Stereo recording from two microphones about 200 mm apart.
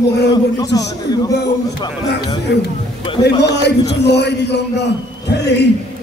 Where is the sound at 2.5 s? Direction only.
55° left (ahead or behind).